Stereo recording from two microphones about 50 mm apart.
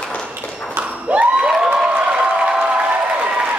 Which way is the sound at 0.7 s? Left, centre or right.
Right.